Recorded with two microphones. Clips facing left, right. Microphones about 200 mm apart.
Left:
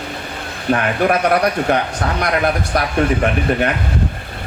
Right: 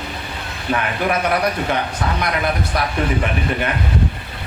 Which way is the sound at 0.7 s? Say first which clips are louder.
Left 4 dB; 50° left (ahead or behind).